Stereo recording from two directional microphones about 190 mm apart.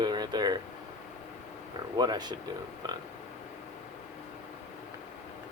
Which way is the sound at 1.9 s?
20° right (ahead or behind).